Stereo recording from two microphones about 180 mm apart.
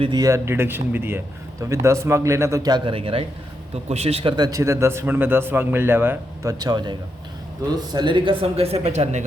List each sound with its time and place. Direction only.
0.0 s speech: 20° right (ahead or behind); by 9.2 s 35° right (ahead or behind)